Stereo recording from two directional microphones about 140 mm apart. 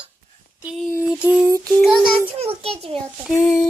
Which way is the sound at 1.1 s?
5° right (ahead or behind).